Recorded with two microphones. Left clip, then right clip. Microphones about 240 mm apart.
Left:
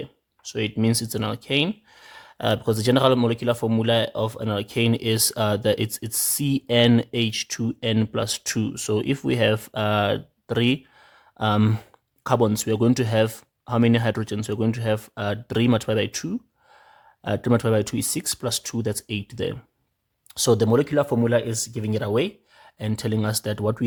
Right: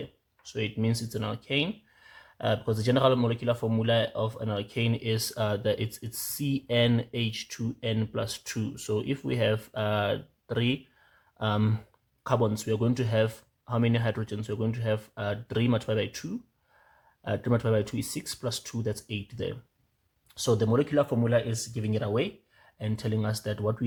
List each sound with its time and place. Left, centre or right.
0.4 s speech: left